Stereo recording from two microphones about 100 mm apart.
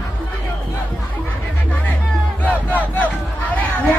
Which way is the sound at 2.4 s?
15° left (ahead or behind).